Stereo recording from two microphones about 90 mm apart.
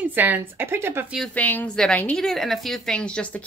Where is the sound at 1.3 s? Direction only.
20° left (ahead or behind).